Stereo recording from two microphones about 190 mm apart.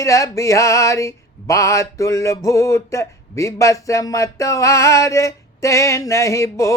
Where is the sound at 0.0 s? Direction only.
15° left (ahead or behind).